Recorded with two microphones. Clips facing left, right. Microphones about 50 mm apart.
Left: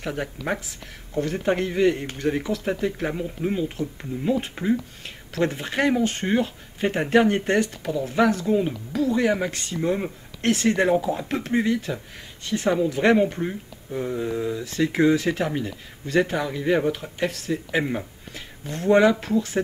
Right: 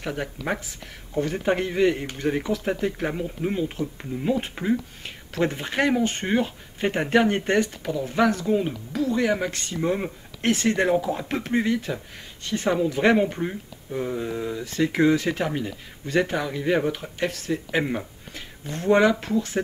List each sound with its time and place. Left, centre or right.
0.0 s speech: centre